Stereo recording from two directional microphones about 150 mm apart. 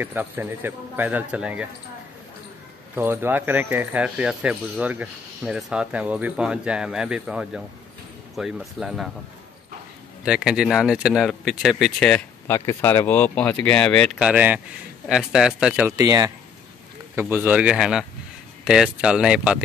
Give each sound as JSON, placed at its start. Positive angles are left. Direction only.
{"t": 0.0, "sound": "speech", "side_deg": -10}
{"t": 3.0, "sound": "speech", "side_deg": -15}
{"t": 10.2, "sound": "speech", "side_deg": -5}
{"t": 12.4, "sound": "speech", "side_deg": 15}
{"t": 14.2, "sound": "speech", "side_deg": -10}
{"t": 16.0, "sound": "speech", "side_deg": -25}
{"t": 17.1, "sound": "speech", "side_deg": -15}